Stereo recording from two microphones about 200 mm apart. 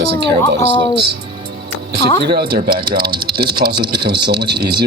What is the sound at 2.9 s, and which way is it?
Speech, 20° right (ahead or behind).